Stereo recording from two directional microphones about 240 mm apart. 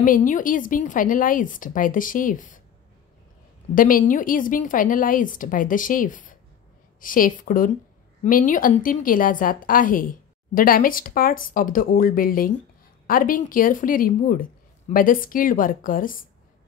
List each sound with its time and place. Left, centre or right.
0.0 s a woman's voice: left
3.7 s a woman's voice: left